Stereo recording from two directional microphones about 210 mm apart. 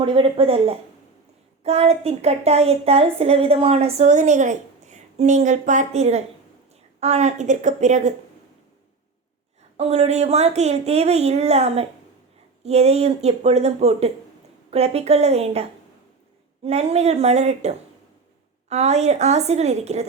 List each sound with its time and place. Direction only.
0.0 s a woman's voice: 25° right (ahead or behind)
9.7 s a woman's voice: 30° right (ahead or behind)